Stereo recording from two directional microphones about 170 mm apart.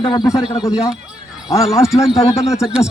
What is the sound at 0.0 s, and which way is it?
Speech, 25° left (ahead or behind).